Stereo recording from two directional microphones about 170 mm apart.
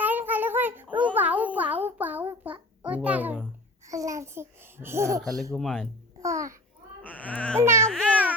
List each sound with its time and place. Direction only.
0.0 s a sound: 10° right (ahead or behind)
3.8 s babbling: 20° right (ahead or behind)
5.5 s speech: centre (ahead or behind)
6.1 s babbling: 20° right (ahead or behind)
7.0 s baby cry: 10° left (ahead or behind)
7.6 s baby cry: 15° right (ahead or behind)
7.9 s babbling: 5° left (ahead or behind)